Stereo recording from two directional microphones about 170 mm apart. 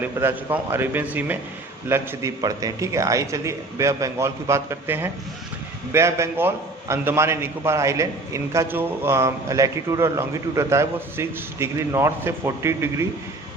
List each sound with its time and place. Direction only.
0.0 s a man's voice: 10° right (ahead or behind)